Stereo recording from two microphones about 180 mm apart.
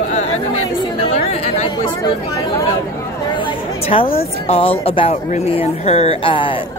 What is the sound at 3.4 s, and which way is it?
Chatter, 30° left (ahead or behind).